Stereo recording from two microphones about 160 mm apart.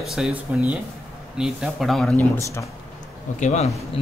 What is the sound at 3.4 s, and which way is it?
Speech, 45° left (ahead or behind).